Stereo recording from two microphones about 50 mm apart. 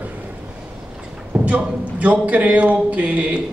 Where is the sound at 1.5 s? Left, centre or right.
Right.